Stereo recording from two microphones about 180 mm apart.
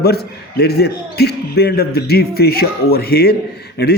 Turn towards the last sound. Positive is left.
turn(degrees=65)  # may be behind; listen again after turning